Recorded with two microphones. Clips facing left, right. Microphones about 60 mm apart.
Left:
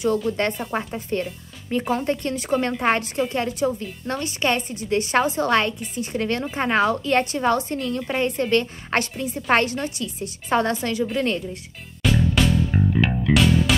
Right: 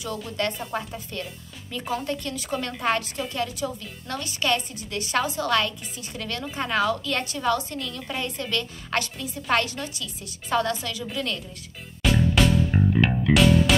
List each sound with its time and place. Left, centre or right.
0.3 s a woman's voice: left
12.0 s music: centre